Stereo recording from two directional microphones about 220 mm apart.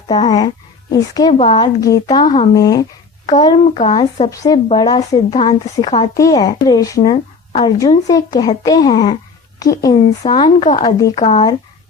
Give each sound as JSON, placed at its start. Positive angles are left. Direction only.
{"t": 0.1, "sound": "a woman's voice", "side_deg": 20}